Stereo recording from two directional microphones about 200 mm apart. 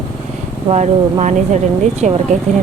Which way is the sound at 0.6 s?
35° right (ahead or behind).